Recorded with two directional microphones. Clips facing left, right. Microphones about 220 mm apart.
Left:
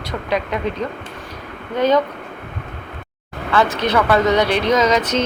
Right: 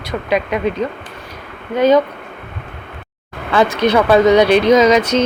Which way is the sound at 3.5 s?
15° right (ahead or behind).